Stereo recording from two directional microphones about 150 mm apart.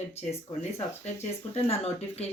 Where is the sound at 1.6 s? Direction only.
45° left (ahead or behind).